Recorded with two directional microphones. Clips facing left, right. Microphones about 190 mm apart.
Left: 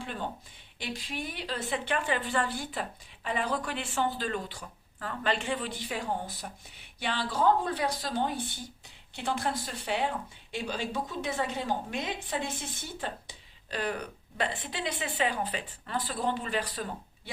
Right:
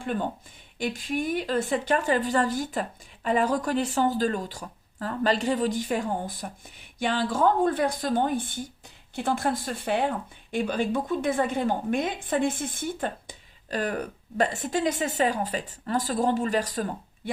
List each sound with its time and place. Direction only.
0.8 s a woman's voice: 50° right (ahead or behind)